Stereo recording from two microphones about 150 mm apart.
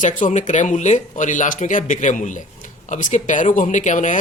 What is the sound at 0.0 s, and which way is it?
A man's voice, 55° left (ahead or behind).